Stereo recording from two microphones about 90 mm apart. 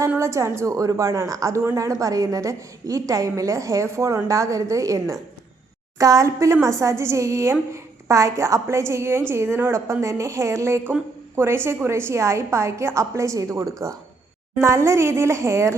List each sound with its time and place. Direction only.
0.2 s a woman's voice: 30° right (ahead or behind)